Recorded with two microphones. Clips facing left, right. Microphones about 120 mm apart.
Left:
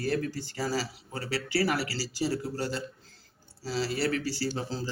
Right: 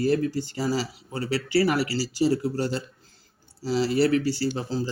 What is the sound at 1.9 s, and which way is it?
Speech, 15° right (ahead or behind).